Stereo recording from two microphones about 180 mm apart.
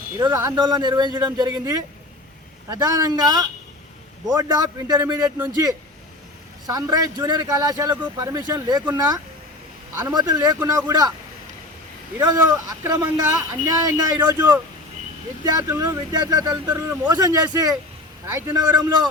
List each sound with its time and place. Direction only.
0.2 s speech: 20° right (ahead or behind)
6.7 s speech: 20° right (ahead or behind)
10.0 s speech: 20° right (ahead or behind)
12.1 s speech: 20° right (ahead or behind)